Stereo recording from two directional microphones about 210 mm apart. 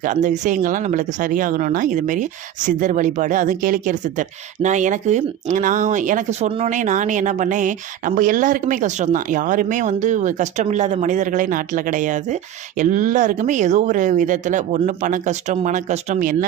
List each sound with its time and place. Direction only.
0.0 s speech: 35° right (ahead or behind)